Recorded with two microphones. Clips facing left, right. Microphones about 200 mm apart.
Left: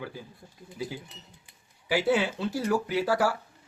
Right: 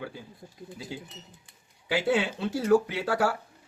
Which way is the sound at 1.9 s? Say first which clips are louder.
Left 1 dB; 25° right (ahead or behind).